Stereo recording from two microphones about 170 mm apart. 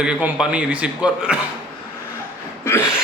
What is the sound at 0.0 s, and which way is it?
A man's voice, 5° right (ahead or behind).